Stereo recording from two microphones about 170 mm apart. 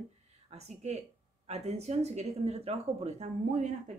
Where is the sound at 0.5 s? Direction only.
40° right (ahead or behind).